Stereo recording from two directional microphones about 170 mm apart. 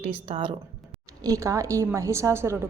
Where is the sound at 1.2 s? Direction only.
20° right (ahead or behind).